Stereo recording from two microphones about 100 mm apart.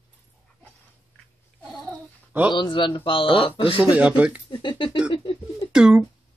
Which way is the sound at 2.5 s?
55° left (ahead or behind).